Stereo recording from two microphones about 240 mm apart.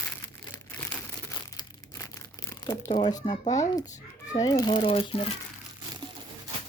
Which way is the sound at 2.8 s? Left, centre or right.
Left.